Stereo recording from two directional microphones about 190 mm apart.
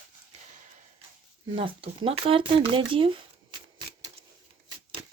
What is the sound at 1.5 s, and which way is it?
Speech, 30° right (ahead or behind).